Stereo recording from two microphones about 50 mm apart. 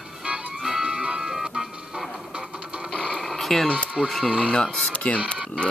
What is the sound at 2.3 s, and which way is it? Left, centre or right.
Music, centre.